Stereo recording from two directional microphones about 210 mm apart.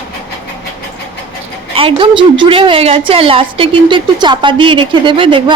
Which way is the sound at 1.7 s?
25° right (ahead or behind).